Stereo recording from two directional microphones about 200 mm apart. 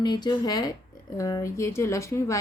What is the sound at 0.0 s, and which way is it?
A woman's voice, 20° left (ahead or behind).